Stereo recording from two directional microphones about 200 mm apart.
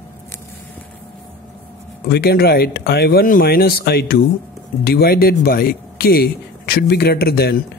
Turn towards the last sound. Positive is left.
turn(degrees=50)  # may be behind; listen again after turning